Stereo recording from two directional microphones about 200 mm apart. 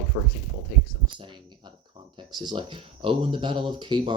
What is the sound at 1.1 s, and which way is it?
Speech, 25° right (ahead or behind).